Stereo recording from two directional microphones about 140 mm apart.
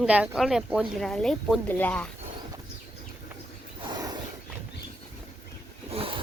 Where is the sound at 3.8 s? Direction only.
30° right (ahead or behind).